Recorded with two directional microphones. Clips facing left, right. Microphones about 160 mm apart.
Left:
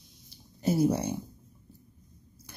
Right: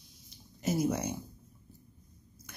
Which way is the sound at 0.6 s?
30° left (ahead or behind).